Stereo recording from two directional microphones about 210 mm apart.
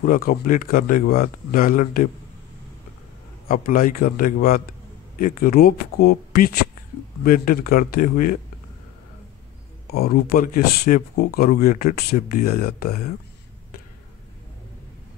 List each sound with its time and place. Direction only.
0.0 s speech: 40° left (ahead or behind)
3.4 s speech: 40° left (ahead or behind)
9.8 s speech: 45° left (ahead or behind)